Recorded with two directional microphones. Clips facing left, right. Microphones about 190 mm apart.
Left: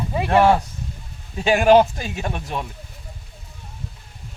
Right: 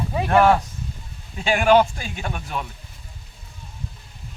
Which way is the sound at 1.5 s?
40° left (ahead or behind).